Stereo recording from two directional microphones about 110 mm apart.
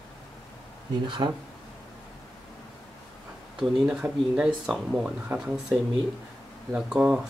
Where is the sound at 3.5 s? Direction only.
5° right (ahead or behind).